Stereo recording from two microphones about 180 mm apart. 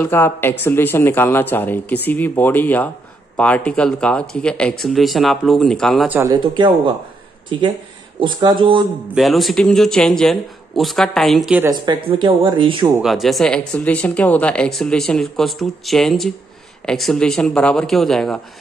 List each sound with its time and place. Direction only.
0.0 s speech: 10° left (ahead or behind)
6.0 s speech: 10° right (ahead or behind)
6.3 s speech: 25° right (ahead or behind)
9.1 s speech: centre (ahead or behind)
11.6 s speech: 25° right (ahead or behind)
13.0 s speech: centre (ahead or behind)